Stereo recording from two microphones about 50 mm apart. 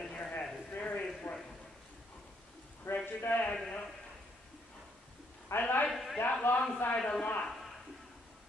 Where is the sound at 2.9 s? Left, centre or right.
Left.